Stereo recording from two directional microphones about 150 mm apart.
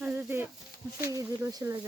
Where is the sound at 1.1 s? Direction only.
25° right (ahead or behind).